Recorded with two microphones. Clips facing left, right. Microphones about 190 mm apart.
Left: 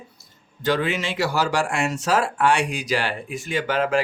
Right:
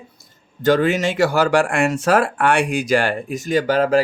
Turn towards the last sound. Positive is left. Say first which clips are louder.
# right 6 dB
turn(degrees=-40)  # may be behind; listen again after turning